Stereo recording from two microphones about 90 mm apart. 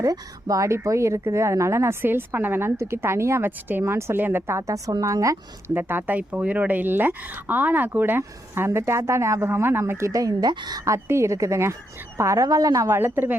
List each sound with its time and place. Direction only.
0.0 s speech: 40° right (ahead or behind)
5.7 s speech: 20° right (ahead or behind); by 10.5 s 40° right (ahead or behind)
10.5 s speech: 55° right (ahead or behind)
10.8 s speech: 35° right (ahead or behind)
13.0 s speech: 25° right (ahead or behind)